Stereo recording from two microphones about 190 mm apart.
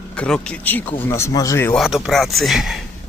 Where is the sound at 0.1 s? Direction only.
5° left (ahead or behind).